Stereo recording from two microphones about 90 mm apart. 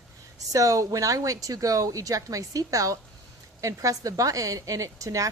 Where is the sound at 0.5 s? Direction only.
40° right (ahead or behind).